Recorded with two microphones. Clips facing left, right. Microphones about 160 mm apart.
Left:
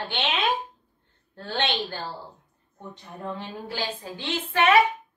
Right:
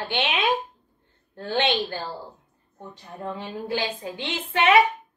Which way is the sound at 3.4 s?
15° right (ahead or behind).